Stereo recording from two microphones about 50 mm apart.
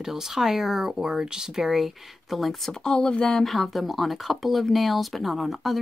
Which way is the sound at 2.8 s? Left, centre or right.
Centre.